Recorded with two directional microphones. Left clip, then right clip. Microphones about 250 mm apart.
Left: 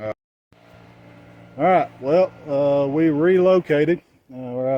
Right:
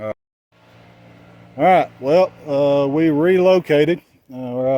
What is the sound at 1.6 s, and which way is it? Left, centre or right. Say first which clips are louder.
Speech: right 4 dB; right.